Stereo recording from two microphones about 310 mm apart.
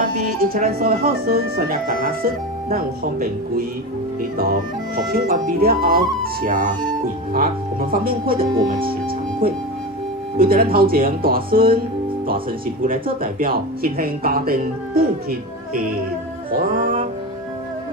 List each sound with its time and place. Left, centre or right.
0.0 s speech: right
12.8 s speech: right
16.7 s speech: right